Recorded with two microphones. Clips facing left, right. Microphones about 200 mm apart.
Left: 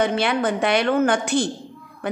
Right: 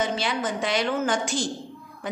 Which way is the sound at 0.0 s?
60° left (ahead or behind).